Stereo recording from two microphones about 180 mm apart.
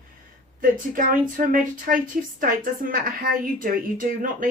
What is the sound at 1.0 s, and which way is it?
A woman's voice, 50° right (ahead or behind).